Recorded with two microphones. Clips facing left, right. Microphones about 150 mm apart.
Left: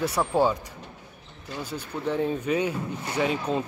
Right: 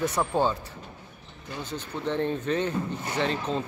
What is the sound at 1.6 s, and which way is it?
Speech, 10° left (ahead or behind).